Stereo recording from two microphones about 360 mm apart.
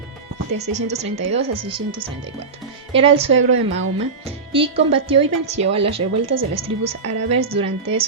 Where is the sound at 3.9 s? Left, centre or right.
Centre.